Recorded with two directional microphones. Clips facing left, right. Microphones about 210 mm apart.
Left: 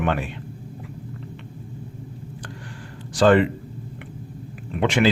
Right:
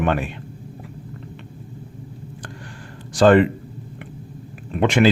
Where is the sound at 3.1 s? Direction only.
45° right (ahead or behind).